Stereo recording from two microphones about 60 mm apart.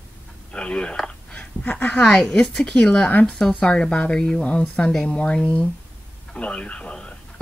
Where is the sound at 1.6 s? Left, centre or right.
Left.